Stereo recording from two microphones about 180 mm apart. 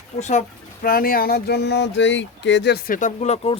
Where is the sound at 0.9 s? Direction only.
55° left (ahead or behind); by 2.7 s 85° left.